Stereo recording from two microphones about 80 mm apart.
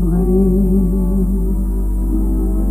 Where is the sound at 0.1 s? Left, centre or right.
Left.